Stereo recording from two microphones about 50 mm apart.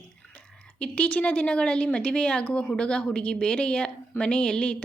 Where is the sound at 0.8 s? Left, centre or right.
Left.